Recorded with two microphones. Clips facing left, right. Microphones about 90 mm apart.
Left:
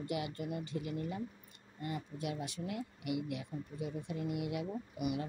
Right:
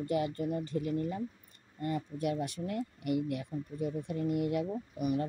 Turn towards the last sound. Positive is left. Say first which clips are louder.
# right 5 dB
turn(degrees=-40)  # may be behind; listen again after turning